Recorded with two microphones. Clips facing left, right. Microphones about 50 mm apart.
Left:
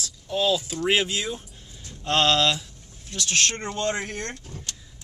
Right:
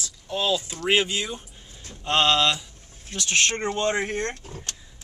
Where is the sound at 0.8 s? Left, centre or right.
Centre.